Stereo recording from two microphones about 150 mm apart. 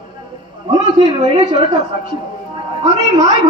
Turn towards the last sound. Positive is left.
turn(degrees=-25)  # may be behind; listen again after turning